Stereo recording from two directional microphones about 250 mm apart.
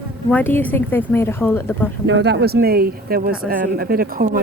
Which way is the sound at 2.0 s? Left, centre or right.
Right.